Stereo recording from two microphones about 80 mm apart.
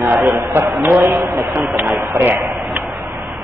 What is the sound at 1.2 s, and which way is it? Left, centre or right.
Speech, right.